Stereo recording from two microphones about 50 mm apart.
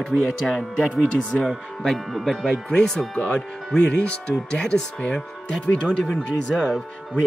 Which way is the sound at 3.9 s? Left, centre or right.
Left.